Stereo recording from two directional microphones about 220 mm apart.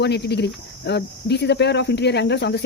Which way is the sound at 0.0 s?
50° left (ahead or behind).